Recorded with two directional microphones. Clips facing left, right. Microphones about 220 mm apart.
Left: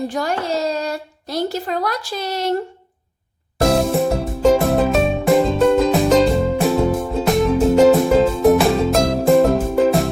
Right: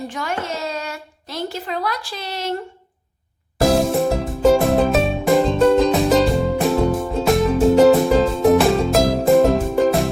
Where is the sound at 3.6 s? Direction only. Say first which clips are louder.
Even; centre (ahead or behind).